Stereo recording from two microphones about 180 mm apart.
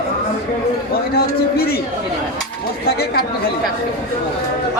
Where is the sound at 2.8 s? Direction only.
60° left (ahead or behind).